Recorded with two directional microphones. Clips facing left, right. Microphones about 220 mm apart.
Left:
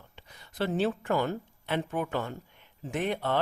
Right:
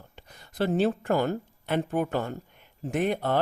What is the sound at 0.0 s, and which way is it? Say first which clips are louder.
Speech: right 3 dB; 40° right (ahead or behind).